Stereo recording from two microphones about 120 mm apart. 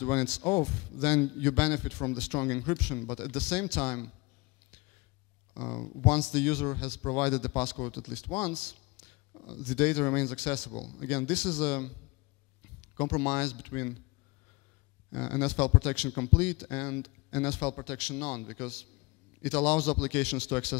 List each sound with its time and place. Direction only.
0.0 s a man's voice: 10° left (ahead or behind)
5.5 s a man's voice: 15° left (ahead or behind)
12.9 s a man's voice: 10° left (ahead or behind)
15.1 s a man's voice: 10° left (ahead or behind)